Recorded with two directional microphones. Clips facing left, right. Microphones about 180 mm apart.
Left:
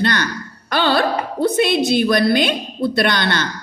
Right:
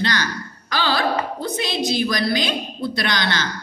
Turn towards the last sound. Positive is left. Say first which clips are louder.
# left 5 dB
turn(degrees=55)  # may be behind; listen again after turning